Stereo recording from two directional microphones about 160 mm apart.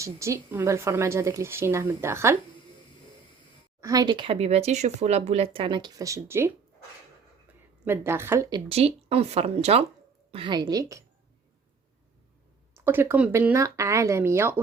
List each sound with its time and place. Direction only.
0.0 s a woman's voice: 20° right (ahead or behind)
3.8 s speech: 20° right (ahead or behind)
4.1 s speech: 35° right (ahead or behind); by 6.5 s 15° right (ahead or behind)
7.9 s a woman's voice: 15° right (ahead or behind)
8.7 s speech: 40° right (ahead or behind)
10.3 s a woman's voice: 30° right (ahead or behind)
12.7 s a woman's voice: 15° right (ahead or behind)